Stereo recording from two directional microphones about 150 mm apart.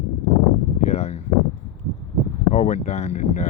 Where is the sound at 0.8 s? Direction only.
45° left (ahead or behind).